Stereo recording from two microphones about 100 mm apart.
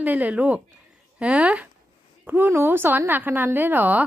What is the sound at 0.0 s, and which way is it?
A woman's voice, 15° right (ahead or behind).